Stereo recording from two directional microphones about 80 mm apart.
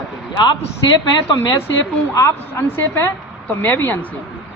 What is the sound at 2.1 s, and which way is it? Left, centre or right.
Speech, left.